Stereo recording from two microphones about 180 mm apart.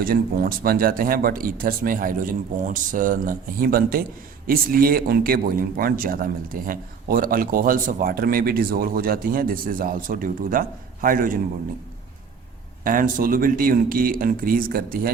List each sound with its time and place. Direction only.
0.0 s speech: 55° right (ahead or behind)
12.8 s speech: 50° right (ahead or behind)